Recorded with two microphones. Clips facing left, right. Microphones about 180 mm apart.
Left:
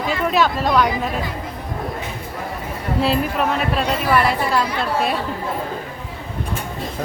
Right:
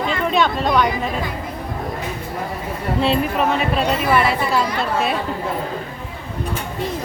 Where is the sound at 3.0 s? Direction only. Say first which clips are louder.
Right 1 dB; centre (ahead or behind).